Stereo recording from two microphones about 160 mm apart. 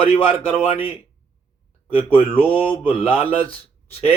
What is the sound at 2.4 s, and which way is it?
Mantra, 35° left (ahead or behind).